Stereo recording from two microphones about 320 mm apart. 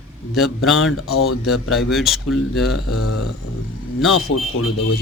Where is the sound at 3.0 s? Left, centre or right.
Left.